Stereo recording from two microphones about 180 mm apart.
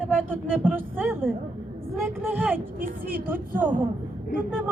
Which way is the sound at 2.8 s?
50° right (ahead or behind).